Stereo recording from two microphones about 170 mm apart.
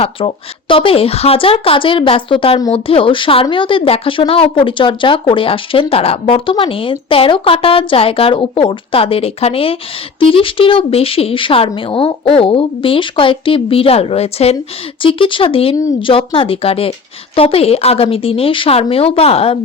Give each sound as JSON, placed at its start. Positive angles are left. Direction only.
{"t": 0.0, "sound": "speech", "side_deg": 30}